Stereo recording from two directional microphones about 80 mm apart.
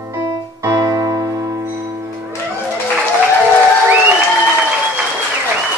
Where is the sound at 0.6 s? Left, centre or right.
Right.